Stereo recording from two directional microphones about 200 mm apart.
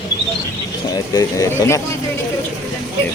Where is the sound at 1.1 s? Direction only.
15° left (ahead or behind).